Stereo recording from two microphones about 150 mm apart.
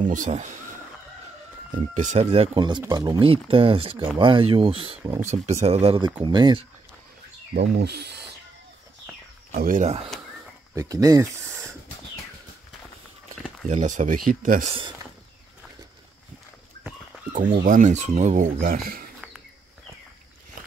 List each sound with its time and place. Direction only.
0.0 s speech: 60° right (ahead or behind)
1.7 s speech: 55° right (ahead or behind); by 4.9 s 35° right (ahead or behind)
5.2 s speech: 50° right (ahead or behind); by 6.6 s 30° right (ahead or behind)
7.5 s speech: 90° right
9.6 s speech: 65° right (ahead or behind)
10.7 s speech: 20° right (ahead or behind)
13.7 s speech: 55° right (ahead or behind)
17.6 s speech: 55° right (ahead or behind)
18.6 s speech: 75° right (ahead or behind)